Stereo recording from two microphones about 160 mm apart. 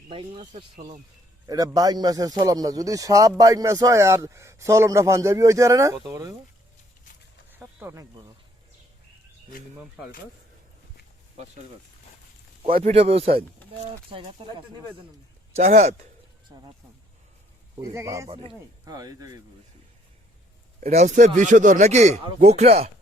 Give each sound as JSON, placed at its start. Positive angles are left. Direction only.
{"t": 0.1, "sound": "speech", "side_deg": -40}
{"t": 1.5, "sound": "a man's voice", "side_deg": -20}
{"t": 7.5, "sound": "a sound", "side_deg": -10}
{"t": 12.6, "sound": "speech", "side_deg": -35}
{"t": 15.5, "sound": "speech", "side_deg": -45}
{"t": 17.7, "sound": "a man's voice", "side_deg": -20}
{"t": 20.8, "sound": "speech", "side_deg": -50}